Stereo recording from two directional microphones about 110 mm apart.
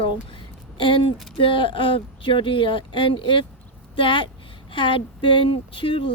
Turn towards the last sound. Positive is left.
turn(degrees=55)  # may be behind; listen again after turning